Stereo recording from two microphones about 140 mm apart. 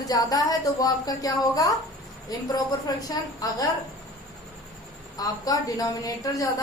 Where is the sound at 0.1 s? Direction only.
25° left (ahead or behind).